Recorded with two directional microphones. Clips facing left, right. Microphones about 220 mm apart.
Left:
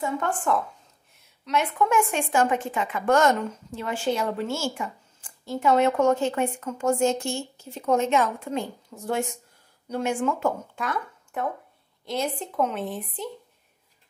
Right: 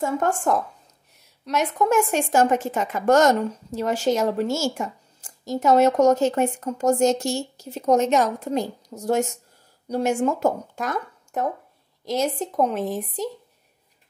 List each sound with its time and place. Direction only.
0.0 s a woman's voice: 45° right (ahead or behind)